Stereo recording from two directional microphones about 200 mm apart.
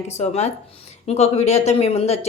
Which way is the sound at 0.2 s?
35° left (ahead or behind).